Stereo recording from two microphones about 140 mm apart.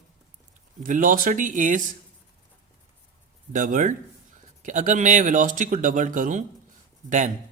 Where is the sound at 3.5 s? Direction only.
70° right (ahead or behind).